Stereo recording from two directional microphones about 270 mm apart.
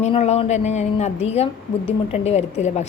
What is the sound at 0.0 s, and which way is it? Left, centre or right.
A woman's voice, left.